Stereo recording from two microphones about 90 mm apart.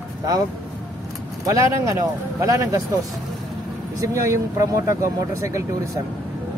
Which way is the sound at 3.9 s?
35° right (ahead or behind).